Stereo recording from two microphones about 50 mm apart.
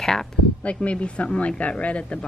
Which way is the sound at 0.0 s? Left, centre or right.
Centre.